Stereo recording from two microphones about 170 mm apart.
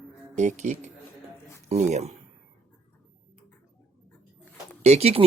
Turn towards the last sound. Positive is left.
turn(degrees=-35)  # may be behind; listen again after turning